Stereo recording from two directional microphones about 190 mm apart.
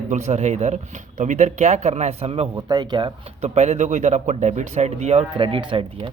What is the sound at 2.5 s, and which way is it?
Speech, 20° right (ahead or behind).